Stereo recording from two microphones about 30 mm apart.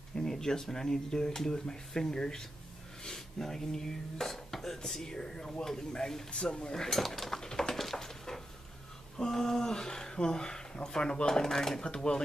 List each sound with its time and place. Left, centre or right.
0.1 s speech: centre
6.4 s speech: left
6.8 s speech: centre
7.7 s a sound: centre
9.2 s speech: centre
11.8 s speech: left